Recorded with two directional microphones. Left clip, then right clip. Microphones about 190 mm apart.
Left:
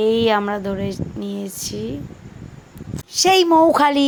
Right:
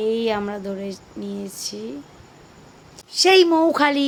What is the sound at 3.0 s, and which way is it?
A woman's voice, 20° left (ahead or behind).